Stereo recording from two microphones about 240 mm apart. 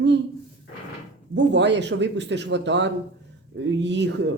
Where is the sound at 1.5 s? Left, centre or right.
Right.